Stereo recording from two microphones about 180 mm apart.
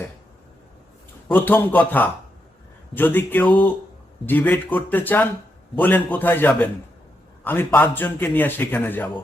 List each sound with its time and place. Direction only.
1.3 s a man's voice: 10° left (ahead or behind)